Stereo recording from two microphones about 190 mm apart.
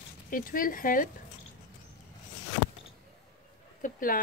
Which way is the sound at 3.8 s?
45° left (ahead or behind).